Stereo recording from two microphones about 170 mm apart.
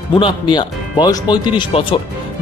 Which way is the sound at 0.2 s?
25° left (ahead or behind).